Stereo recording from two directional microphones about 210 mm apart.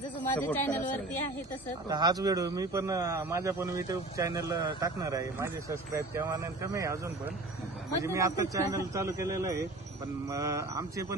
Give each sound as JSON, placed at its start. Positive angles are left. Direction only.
{"t": 0.2, "sound": "speech", "side_deg": 10}
{"t": 1.9, "sound": "a man's voice", "side_deg": -20}
{"t": 8.0, "sound": "a man's voice", "side_deg": -15}